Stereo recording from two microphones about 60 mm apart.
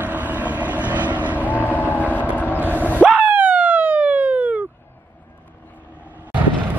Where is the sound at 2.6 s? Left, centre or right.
Right.